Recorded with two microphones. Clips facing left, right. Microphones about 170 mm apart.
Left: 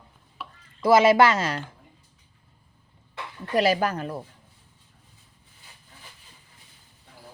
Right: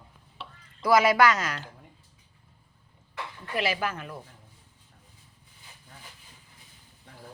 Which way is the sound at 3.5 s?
40° left (ahead or behind).